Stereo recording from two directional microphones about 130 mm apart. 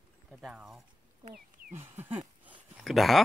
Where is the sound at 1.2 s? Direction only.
90° right.